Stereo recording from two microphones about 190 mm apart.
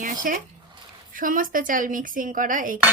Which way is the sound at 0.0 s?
45° right (ahead or behind).